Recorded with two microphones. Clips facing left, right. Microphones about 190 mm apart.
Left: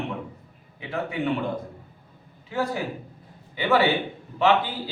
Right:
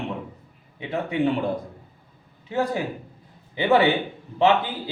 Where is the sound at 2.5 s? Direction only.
20° right (ahead or behind).